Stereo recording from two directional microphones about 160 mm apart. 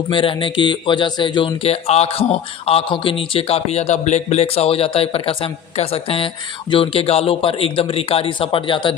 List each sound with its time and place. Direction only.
0.1 s speech: 30° left (ahead or behind)